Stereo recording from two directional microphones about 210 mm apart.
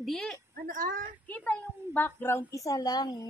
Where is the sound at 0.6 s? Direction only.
40° right (ahead or behind).